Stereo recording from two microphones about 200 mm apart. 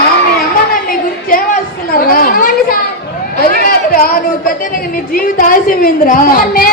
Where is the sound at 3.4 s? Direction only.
45° left (ahead or behind).